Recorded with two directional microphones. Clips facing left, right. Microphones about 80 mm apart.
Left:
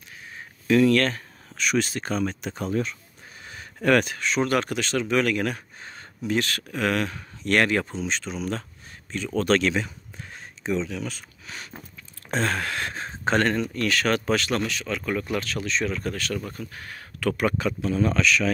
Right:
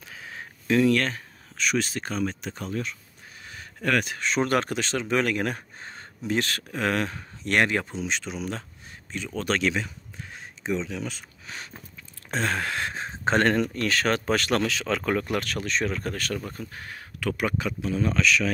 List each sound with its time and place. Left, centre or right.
0.7 s speech: centre
1.6 s speech: centre
2.5 s speech: centre
4.2 s speech: right; by 9.8 s centre
9.8 s a sound: centre
10.6 s speech: centre; by 14.3 s right
14.3 s speech: right
14.6 s speech: right
15.1 s speech: right
16.3 s speech: right
17.2 s speech: centre